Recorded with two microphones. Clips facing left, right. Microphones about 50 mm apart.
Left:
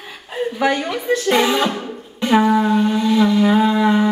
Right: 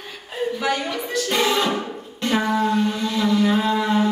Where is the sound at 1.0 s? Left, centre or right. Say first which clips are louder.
Left 6 dB; left.